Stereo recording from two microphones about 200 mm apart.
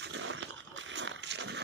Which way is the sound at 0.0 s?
65° right (ahead or behind).